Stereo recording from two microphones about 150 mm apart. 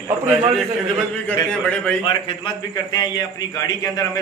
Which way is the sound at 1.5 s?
5° left (ahead or behind).